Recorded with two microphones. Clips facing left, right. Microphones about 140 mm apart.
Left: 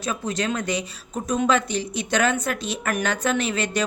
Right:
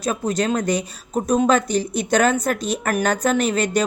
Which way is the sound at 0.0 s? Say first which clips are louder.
Right 5 dB; 40° right (ahead or behind).